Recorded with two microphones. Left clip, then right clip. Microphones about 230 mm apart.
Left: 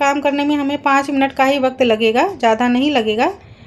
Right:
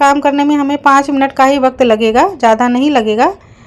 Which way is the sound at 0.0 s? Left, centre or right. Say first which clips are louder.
Right 6 dB; centre.